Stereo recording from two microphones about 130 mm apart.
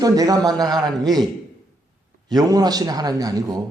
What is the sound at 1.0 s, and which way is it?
Speech, centre (ahead or behind).